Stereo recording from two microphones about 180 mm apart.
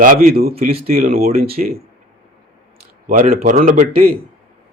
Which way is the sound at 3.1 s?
55° right (ahead or behind).